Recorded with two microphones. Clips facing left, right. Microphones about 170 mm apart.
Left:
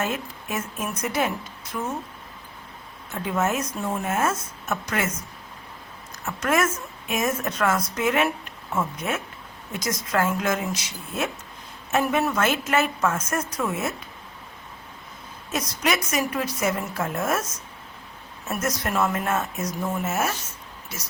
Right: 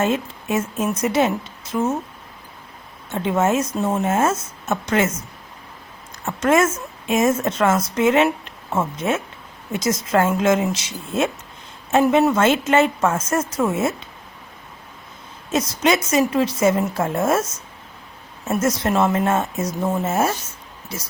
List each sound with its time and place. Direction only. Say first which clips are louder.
0.0 s a woman's voice: right 7 dB; 25° right (ahead or behind)
3.1 s a woman's voice: right 6 dB; 25° right (ahead or behind)
6.2 s a woman's voice: right 6 dB; 25° right (ahead or behind)
15.4 s a woman's voice: right 7 dB; 25° right (ahead or behind)